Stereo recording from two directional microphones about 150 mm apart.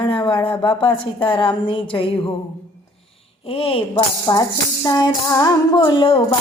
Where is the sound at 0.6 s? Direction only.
35° left (ahead or behind).